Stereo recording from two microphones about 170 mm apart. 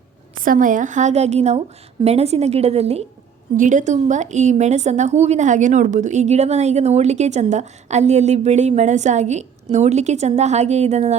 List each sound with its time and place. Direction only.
0.3 s a woman's voice: 55° right (ahead or behind)